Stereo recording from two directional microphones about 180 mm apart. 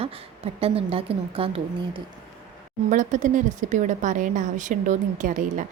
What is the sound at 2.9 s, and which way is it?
A woman's voice, 45° right (ahead or behind).